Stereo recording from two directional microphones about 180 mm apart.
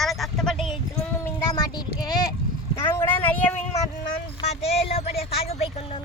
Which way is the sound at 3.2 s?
10° left (ahead or behind).